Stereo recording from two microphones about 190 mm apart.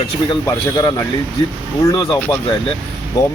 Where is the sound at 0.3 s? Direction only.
20° left (ahead or behind).